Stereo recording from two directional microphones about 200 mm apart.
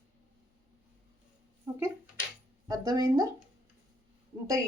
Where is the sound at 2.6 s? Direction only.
20° right (ahead or behind).